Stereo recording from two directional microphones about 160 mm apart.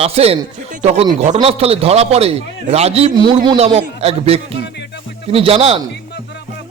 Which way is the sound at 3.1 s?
25° right (ahead or behind).